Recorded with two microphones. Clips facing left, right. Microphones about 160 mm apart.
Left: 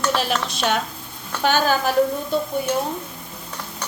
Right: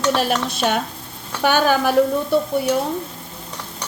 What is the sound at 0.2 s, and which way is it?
Speech, 55° right (ahead or behind).